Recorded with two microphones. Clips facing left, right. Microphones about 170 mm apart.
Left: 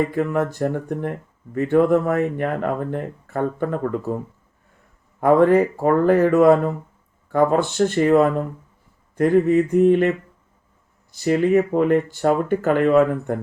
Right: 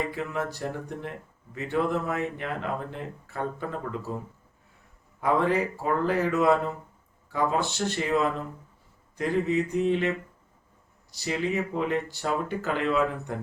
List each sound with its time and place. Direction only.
0.0 s speech: 50° left (ahead or behind)
5.2 s speech: 50° left (ahead or behind)